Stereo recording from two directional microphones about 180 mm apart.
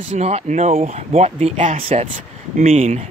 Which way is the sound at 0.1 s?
40° right (ahead or behind).